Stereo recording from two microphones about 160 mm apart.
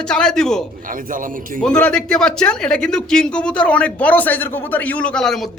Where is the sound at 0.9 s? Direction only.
60° right (ahead or behind).